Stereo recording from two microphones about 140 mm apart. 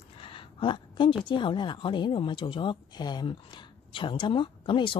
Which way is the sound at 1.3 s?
35° left (ahead or behind).